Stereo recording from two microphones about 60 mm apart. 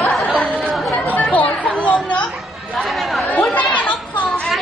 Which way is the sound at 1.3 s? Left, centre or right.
Left.